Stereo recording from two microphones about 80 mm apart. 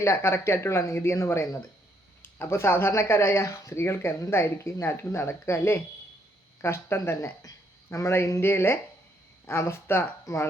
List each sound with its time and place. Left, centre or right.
0.0 s speech: left